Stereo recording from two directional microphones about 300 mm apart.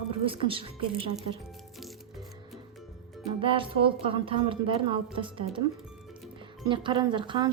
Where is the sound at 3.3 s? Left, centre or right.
Centre.